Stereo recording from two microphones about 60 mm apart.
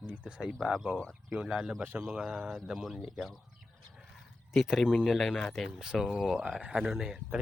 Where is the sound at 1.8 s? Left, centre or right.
Right.